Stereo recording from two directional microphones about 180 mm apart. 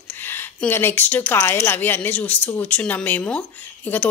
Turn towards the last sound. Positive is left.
turn(degrees=10)  # may be behind; listen again after turning